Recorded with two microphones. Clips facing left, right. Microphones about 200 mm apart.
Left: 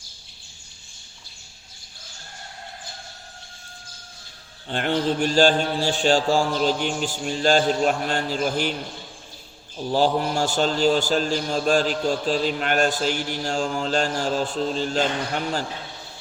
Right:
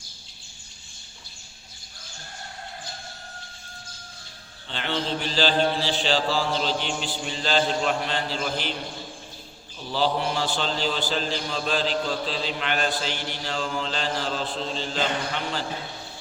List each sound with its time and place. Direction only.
4.7 s a man's voice: 50° left (ahead or behind)
9.7 s a man's voice: 45° left (ahead or behind)